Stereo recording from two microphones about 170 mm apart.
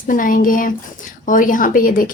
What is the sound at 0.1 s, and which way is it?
A woman's voice, 50° left (ahead or behind).